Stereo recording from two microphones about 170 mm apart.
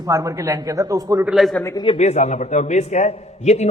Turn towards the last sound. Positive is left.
turn(degrees=40)  # may be behind; listen again after turning